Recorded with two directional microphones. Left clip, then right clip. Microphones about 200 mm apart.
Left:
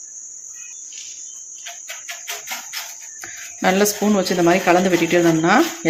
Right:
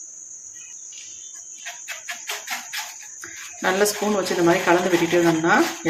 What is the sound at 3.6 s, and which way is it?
Speech, 35° left (ahead or behind).